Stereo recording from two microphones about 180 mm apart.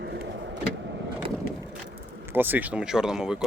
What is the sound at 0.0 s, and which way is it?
Vehicle, 70° right (ahead or behind).